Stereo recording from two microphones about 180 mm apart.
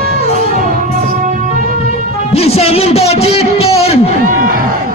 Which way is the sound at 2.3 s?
35° left (ahead or behind).